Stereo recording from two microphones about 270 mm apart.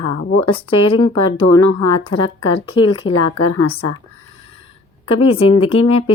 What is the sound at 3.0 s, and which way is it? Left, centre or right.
Speech, left.